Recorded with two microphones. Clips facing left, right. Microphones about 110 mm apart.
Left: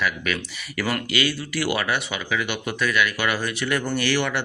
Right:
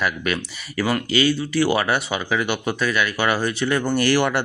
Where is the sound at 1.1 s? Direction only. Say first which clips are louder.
Right 5 dB; 30° right (ahead or behind).